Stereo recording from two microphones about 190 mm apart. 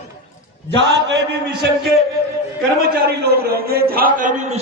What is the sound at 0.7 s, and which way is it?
A man's voice, 70° right (ahead or behind).